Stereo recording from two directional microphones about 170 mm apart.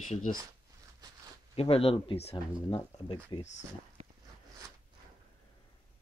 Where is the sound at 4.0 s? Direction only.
40° right (ahead or behind).